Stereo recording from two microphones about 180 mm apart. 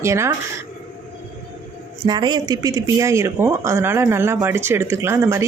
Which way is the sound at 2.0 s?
25° right (ahead or behind).